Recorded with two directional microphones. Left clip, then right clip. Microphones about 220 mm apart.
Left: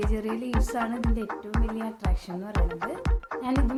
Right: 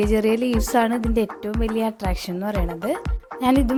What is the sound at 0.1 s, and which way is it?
Speech, 40° right (ahead or behind).